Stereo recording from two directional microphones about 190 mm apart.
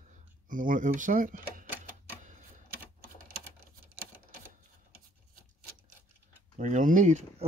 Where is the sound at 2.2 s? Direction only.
40° right (ahead or behind).